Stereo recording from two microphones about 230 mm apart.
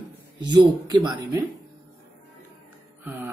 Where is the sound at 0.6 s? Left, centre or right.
Centre.